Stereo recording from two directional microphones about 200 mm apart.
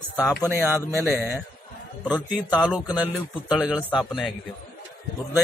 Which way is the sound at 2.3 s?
5° right (ahead or behind).